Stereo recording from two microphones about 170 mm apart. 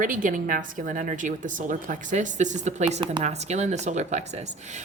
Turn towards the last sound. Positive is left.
turn(degrees=-45)  # may be behind; listen again after turning